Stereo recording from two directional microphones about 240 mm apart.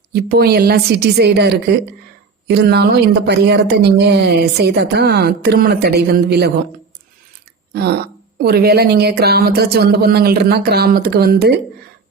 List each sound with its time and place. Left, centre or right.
0.1 s a woman's voice: right
7.7 s a woman's voice: right